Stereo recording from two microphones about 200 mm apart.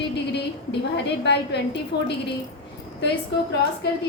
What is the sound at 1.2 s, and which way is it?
Speech, 60° left (ahead or behind).